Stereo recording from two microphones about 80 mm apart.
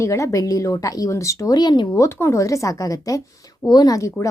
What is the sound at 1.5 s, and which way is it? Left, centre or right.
Speech, left.